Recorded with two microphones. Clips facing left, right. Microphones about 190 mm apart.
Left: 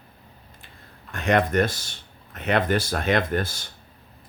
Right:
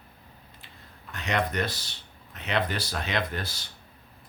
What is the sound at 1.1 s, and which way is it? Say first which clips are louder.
Speech: left 7 dB; 50° left (ahead or behind).